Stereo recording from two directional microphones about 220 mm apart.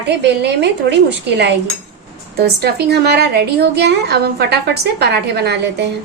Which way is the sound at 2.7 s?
45° right (ahead or behind).